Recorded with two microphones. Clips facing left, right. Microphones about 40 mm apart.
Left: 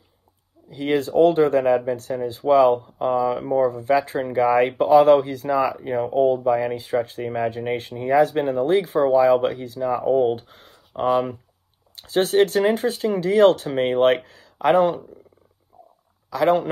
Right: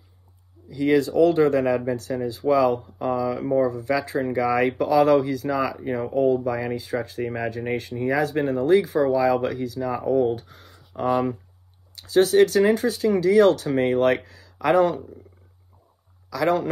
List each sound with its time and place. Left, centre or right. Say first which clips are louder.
0.7 s speech: right 2 dB; left
9.8 s speech: left 3 dB; left
11.9 s speech: right 2 dB; left
14.7 s speech: left 2 dB; left
16.3 s a man's voice: left 3 dB; left